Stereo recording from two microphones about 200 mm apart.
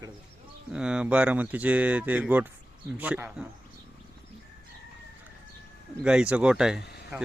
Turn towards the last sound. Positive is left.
turn(degrees=-5)  # may be behind; listen again after turning